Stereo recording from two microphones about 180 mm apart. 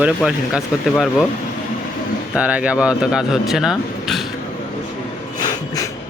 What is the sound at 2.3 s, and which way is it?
Speech, 5° right (ahead or behind).